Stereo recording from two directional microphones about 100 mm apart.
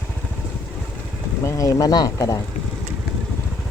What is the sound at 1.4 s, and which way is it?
Speech, 35° left (ahead or behind).